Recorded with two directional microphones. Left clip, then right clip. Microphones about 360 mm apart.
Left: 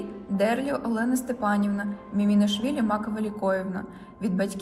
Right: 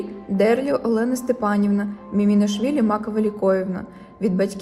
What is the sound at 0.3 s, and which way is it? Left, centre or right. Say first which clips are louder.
Speech: right 7 dB; right.